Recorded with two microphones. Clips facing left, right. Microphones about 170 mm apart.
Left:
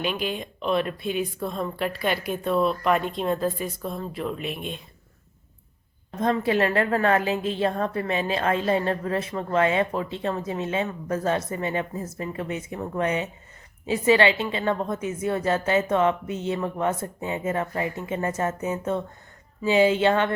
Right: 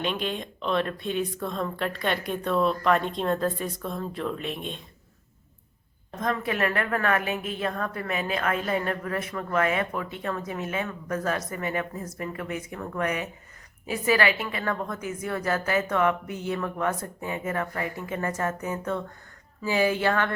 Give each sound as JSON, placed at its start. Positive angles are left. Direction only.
{"t": 0.0, "sound": "speech", "side_deg": 5}
{"t": 6.1, "sound": "a woman's voice", "side_deg": 30}